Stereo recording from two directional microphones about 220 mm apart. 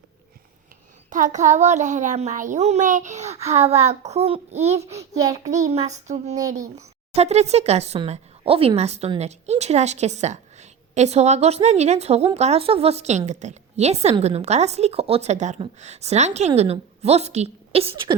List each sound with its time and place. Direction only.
1.1 s a child's voice: 35° right (ahead or behind)
4.9 s child singing: 15° right (ahead or behind)
5.5 s a child's voice: 35° right (ahead or behind)